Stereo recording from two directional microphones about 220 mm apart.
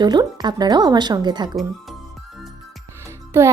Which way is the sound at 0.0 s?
20° right (ahead or behind).